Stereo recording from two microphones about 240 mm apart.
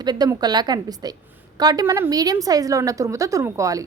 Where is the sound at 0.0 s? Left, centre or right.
Centre.